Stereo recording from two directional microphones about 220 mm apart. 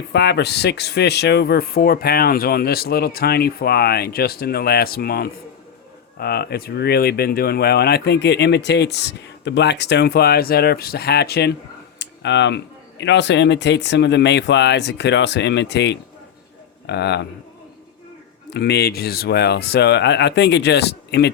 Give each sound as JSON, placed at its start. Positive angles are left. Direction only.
{"t": 0.1, "sound": "speech", "side_deg": 50}
{"t": 18.5, "sound": "speech", "side_deg": 50}